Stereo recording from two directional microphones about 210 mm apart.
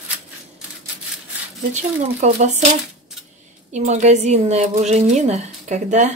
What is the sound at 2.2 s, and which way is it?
Speech, 35° right (ahead or behind).